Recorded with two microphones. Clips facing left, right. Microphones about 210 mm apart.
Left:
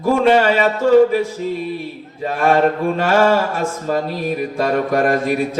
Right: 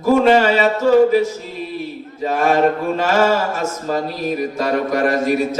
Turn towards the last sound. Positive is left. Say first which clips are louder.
# even
turn(degrees=-40)  # may be behind; listen again after turning